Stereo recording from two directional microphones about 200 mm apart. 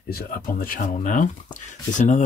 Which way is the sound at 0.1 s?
45° left (ahead or behind).